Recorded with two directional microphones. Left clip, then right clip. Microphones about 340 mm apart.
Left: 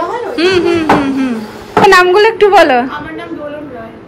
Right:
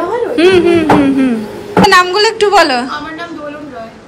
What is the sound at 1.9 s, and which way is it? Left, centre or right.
A woman's voice, centre.